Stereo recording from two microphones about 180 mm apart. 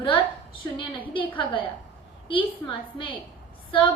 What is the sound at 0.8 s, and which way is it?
A woman's voice, 30° left (ahead or behind).